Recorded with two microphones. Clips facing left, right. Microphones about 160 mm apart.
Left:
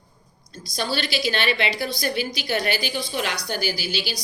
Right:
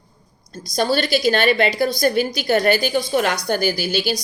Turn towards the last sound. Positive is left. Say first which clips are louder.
# right 7 dB
turn(degrees=-45)  # may be behind; listen again after turning